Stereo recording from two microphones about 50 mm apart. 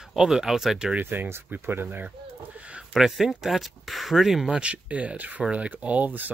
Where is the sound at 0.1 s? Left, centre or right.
Centre.